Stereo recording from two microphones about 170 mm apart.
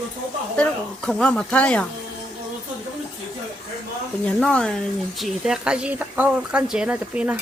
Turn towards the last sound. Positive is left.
turn(degrees=-10)  # may be behind; listen again after turning